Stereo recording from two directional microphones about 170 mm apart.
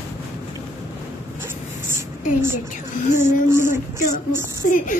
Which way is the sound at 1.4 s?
15° right (ahead or behind).